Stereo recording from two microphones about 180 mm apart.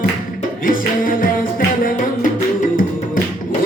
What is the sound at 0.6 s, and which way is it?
Music, 50° left (ahead or behind).